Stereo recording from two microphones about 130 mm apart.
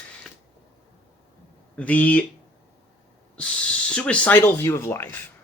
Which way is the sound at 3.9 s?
10° left (ahead or behind).